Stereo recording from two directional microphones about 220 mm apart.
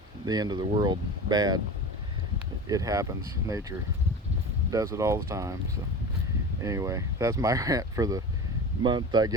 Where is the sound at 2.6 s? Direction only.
15° right (ahead or behind).